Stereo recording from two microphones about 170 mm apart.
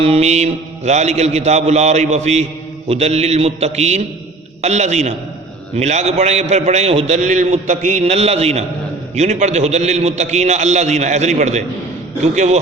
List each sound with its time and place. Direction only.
0.0 s a man's voice: 35° right (ahead or behind)